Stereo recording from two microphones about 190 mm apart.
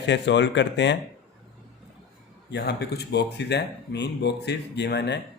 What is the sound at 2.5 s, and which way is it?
A man's voice, 60° left (ahead or behind).